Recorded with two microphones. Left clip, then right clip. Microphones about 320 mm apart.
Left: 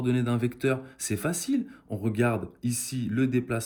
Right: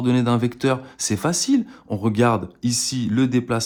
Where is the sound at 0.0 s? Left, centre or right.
Centre.